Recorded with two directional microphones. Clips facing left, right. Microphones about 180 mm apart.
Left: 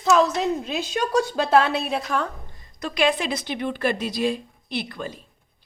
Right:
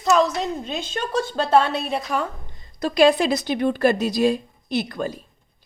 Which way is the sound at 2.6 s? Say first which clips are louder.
Right 7 dB; 35° right (ahead or behind).